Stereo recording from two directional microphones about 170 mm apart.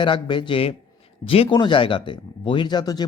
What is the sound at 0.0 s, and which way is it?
Speech, 30° left (ahead or behind).